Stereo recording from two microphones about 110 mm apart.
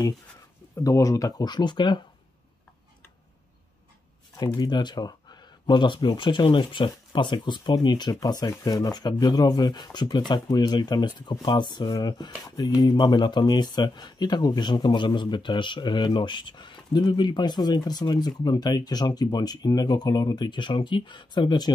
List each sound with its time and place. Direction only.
0.7 s speech: 30° left (ahead or behind)
4.6 s speech: 40° left (ahead or behind)